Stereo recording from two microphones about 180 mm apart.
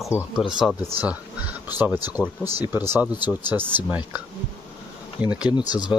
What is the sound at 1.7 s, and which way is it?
Speech, 10° right (ahead or behind).